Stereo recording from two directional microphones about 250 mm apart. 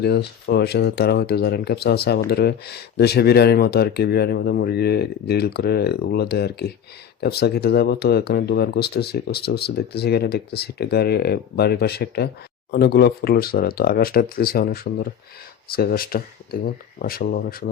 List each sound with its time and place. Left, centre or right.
0.0 s speech: left